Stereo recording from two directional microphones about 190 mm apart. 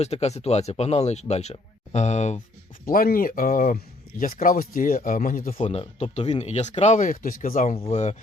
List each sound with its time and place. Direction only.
0.0 s speech: 35° left (ahead or behind)
2.8 s speech: 50° left (ahead or behind)
5.5 s speech: 30° left (ahead or behind)
7.8 s speech: 30° left (ahead or behind)